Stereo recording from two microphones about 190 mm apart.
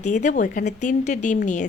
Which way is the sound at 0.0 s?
40° left (ahead or behind).